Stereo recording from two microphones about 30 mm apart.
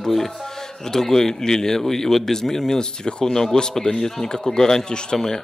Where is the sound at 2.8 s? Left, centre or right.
Left.